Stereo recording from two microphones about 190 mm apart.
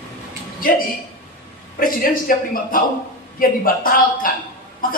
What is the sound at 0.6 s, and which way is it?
A man's voice, 45° left (ahead or behind).